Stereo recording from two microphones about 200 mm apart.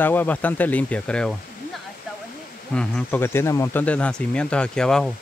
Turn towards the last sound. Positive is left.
turn(degrees=5)  # may be behind; listen again after turning